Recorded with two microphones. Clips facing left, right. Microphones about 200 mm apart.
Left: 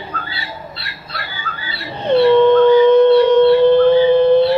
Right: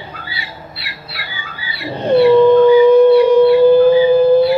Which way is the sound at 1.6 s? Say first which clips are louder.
Right 2 dB; 10° right (ahead or behind).